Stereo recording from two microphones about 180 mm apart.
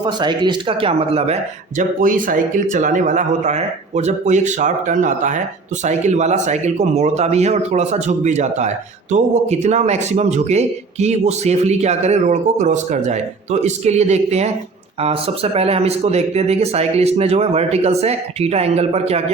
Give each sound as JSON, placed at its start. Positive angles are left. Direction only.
{"t": 0.0, "sound": "speech", "side_deg": -25}
{"t": 2.0, "sound": "speech", "side_deg": -50}